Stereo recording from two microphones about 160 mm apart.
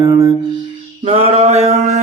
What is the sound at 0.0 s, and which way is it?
Music, 20° right (ahead or behind).